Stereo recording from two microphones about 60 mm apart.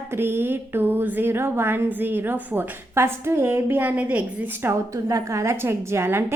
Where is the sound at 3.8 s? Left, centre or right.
Right.